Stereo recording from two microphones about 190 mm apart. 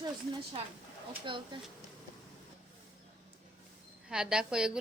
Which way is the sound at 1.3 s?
25° right (ahead or behind).